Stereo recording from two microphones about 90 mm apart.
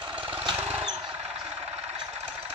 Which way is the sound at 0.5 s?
25° right (ahead or behind).